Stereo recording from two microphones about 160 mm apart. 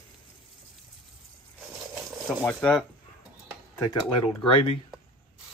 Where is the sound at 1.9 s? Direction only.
15° right (ahead or behind).